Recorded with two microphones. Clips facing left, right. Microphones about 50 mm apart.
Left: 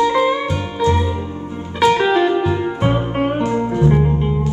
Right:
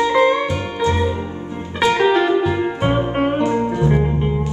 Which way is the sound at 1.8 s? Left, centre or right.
Centre.